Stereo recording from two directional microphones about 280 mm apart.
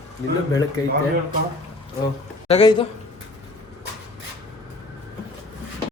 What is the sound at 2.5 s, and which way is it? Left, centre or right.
Speech, centre.